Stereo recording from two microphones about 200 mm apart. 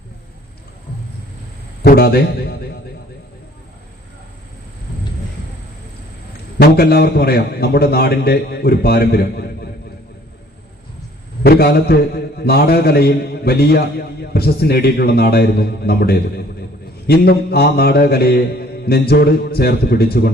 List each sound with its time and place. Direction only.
1.8 s a man's voice: 50° left (ahead or behind)
6.6 s a man's voice: 50° left (ahead or behind)
11.4 s a man's voice: 50° left (ahead or behind)